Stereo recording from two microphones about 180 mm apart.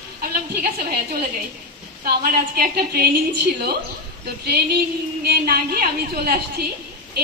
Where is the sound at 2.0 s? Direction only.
55° right (ahead or behind).